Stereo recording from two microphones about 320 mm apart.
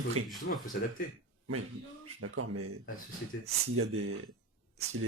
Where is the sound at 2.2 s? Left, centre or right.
Right.